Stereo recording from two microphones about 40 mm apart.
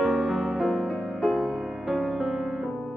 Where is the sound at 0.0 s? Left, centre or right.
Right.